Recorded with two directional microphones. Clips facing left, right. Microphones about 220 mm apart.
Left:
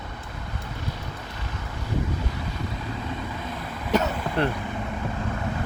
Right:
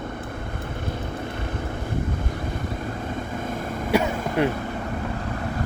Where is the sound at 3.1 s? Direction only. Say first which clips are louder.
Right 4 dB; 50° right (ahead or behind).